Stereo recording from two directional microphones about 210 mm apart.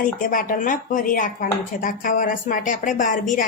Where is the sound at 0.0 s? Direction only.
40° left (ahead or behind).